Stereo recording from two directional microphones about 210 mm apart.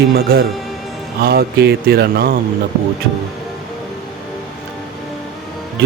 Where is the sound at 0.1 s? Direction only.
45° right (ahead or behind).